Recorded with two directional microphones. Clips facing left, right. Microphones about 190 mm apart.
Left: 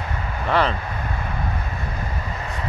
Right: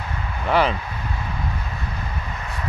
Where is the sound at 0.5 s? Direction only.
5° right (ahead or behind).